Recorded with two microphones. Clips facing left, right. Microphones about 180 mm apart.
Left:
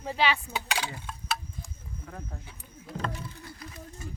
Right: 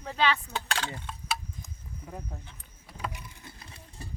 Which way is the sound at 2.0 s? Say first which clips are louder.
Right 1 dB; 15° right (ahead or behind).